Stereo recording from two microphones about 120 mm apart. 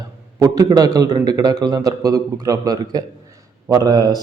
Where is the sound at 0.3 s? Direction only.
30° right (ahead or behind).